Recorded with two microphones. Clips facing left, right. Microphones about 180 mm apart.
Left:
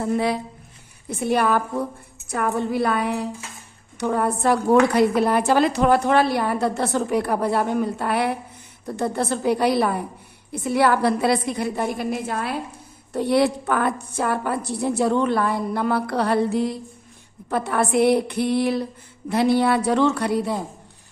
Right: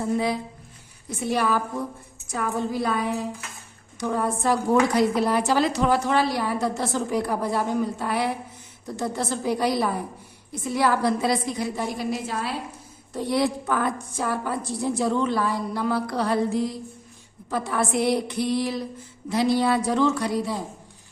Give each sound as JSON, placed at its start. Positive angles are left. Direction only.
{"t": 0.0, "sound": "a woman's voice", "side_deg": 65}